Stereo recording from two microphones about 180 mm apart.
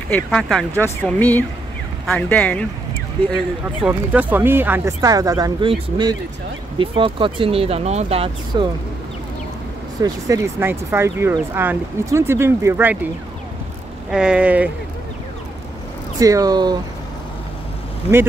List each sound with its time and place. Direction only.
0.1 s speech: 5° left (ahead or behind)
3.8 s speech: 10° right (ahead or behind); by 8.6 s 35° right (ahead or behind)
10.0 s speech: 20° right (ahead or behind)
14.1 s speech: 5° right (ahead or behind)
16.2 s speech: 20° right (ahead or behind)